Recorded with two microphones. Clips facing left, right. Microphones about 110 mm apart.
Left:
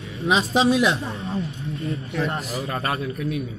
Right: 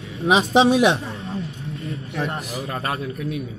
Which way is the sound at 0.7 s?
60° right (ahead or behind).